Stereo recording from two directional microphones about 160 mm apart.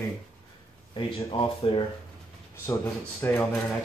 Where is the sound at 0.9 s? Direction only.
30° left (ahead or behind).